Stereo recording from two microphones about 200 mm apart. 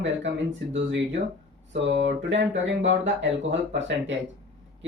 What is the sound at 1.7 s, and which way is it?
Speech, 60° right (ahead or behind).